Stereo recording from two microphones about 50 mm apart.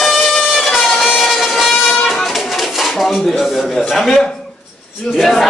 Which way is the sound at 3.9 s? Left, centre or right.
Centre.